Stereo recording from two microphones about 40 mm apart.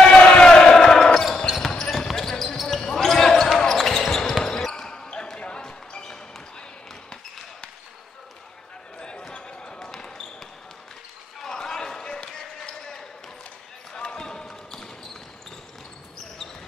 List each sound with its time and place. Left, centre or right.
0.0 s basketball bounce: left
1.9 s a sound: centre
2.5 s basketball bounce: centre
4.8 s basketball bounce: left
9.0 s basketball bounce: left
11.4 s basketball bounce: centre